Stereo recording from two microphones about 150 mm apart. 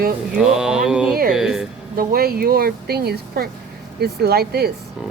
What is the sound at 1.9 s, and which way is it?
A woman's voice, 90° right.